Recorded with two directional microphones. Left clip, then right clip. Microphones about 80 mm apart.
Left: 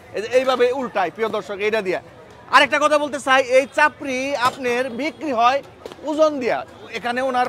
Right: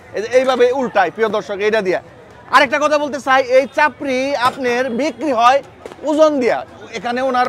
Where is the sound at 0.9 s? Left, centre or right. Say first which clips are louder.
Right 6 dB; right.